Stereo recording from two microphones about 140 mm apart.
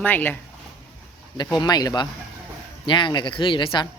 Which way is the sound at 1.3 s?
30° left (ahead or behind).